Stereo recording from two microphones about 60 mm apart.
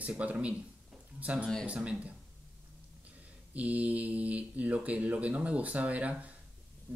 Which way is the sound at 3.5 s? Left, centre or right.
Right.